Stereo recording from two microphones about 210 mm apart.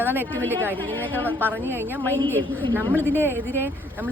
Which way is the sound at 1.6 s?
10° right (ahead or behind).